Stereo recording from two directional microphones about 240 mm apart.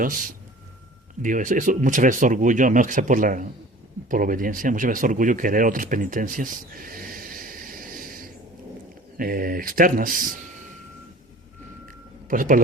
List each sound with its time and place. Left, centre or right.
1.2 s speech: right
12.3 s speech: right